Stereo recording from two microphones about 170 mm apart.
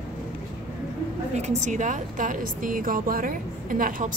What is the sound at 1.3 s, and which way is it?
A woman's voice, 40° right (ahead or behind).